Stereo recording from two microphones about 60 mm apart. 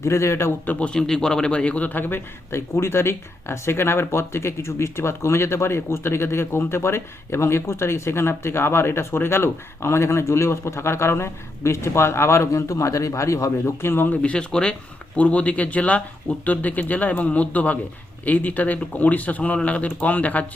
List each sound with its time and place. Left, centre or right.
0.0 s a man's voice: left
0.6 s speech: left
0.9 s a man's voice: centre; by 13.7 s left
13.8 s speech: left
14.1 s speech: centre